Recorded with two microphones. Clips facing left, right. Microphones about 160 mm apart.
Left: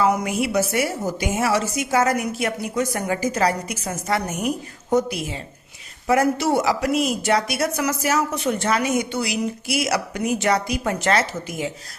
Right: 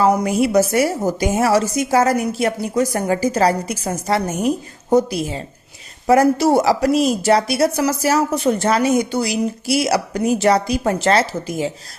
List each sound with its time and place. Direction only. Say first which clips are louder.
0.0 s a woman's voice: right 5 dB; 35° right (ahead or behind)